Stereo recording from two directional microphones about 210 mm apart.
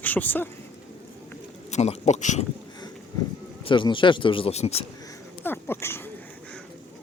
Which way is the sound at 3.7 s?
25° left (ahead or behind).